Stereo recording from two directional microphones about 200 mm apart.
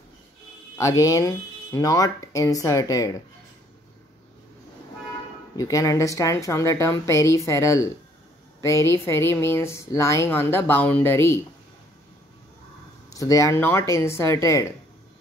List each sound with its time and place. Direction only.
0.7 s speech: 15° left (ahead or behind)
5.6 s speech: 15° left (ahead or behind)
13.1 s speech: 15° left (ahead or behind)